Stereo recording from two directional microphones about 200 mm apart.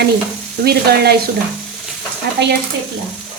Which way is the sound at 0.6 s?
50° right (ahead or behind).